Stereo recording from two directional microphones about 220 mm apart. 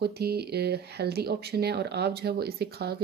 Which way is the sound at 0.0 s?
45° right (ahead or behind).